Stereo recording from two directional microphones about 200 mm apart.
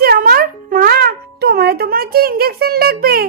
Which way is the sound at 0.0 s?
50° right (ahead or behind).